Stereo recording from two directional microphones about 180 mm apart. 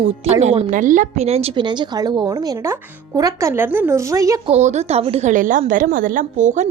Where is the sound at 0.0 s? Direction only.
35° right (ahead or behind); by 4.4 s 20° right (ahead or behind).